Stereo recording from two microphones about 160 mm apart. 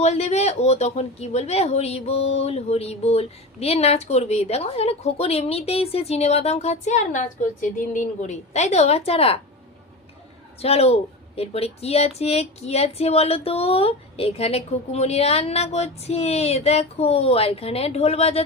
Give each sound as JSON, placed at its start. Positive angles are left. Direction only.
{"t": 0.0, "sound": "a woman's voice", "side_deg": 45}
{"t": 10.6, "sound": "speech", "side_deg": 40}